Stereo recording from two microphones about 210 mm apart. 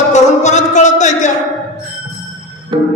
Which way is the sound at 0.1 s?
35° left (ahead or behind).